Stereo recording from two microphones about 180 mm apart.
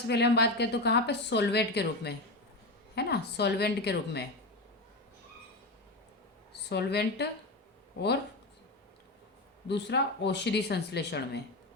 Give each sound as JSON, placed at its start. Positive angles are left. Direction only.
{"t": 0.1, "sound": "a woman's voice", "side_deg": 70}
{"t": 6.5, "sound": "a woman's voice", "side_deg": 65}
{"t": 9.6, "sound": "a woman's voice", "side_deg": 70}